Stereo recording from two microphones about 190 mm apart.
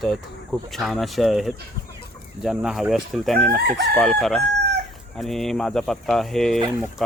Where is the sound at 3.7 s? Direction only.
60° right (ahead or behind).